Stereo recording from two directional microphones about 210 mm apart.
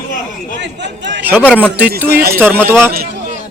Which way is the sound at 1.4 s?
10° left (ahead or behind).